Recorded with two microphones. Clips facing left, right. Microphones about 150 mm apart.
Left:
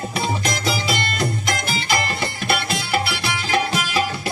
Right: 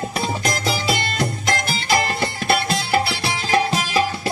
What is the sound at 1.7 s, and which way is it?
Music, 35° right (ahead or behind).